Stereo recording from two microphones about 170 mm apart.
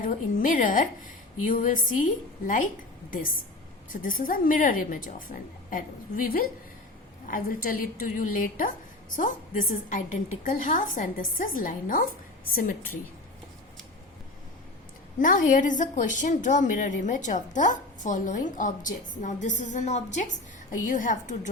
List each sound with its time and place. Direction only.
0.0 s a woman's voice: 50° left (ahead or behind)
3.1 s a woman's voice: 55° left (ahead or behind)
15.2 s a woman's voice: 50° left (ahead or behind)